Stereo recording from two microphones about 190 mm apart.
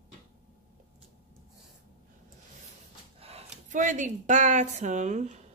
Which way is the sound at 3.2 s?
35° right (ahead or behind).